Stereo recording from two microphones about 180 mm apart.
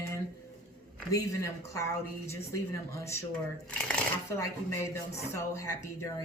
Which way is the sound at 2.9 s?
15° left (ahead or behind).